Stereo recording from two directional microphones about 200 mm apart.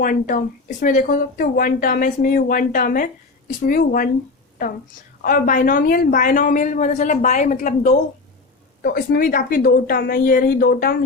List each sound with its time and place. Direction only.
0.0 s speech: 40° left (ahead or behind)
5.2 s a woman's voice: 45° left (ahead or behind)